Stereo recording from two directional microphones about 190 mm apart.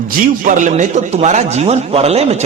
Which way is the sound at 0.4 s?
40° right (ahead or behind).